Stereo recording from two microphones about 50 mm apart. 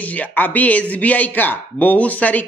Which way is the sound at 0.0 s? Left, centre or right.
Left.